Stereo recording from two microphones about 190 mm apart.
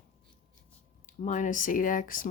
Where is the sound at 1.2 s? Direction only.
40° left (ahead or behind).